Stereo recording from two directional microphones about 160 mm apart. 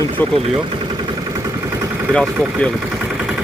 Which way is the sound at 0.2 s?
10° left (ahead or behind).